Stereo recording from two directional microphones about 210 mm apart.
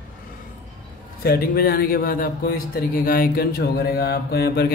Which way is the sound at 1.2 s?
45° left (ahead or behind).